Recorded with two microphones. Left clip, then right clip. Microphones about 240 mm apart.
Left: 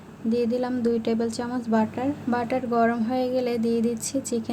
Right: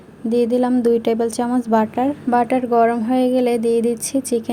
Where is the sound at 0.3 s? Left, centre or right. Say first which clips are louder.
Right 8 dB; right.